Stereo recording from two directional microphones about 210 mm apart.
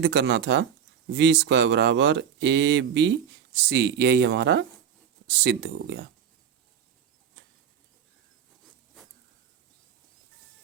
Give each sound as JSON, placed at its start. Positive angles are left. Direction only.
{"t": 0.0, "sound": "speech", "side_deg": -55}